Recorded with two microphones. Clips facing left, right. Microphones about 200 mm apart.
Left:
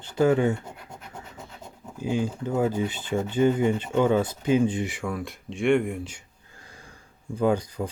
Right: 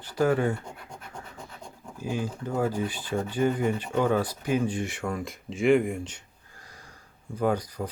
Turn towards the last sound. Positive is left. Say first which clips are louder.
# left 3 dB
turn(degrees=25)  # may be behind; listen again after turning